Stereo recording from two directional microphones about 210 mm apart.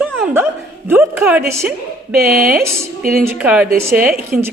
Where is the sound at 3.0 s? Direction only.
45° right (ahead or behind).